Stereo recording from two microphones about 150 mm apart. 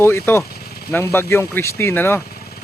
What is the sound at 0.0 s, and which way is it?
Speech, 15° left (ahead or behind).